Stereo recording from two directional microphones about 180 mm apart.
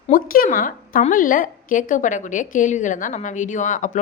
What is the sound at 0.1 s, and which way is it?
A woman's voice, 50° left (ahead or behind).